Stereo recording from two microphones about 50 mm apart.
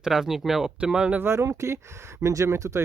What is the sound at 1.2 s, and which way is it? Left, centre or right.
Speech, right.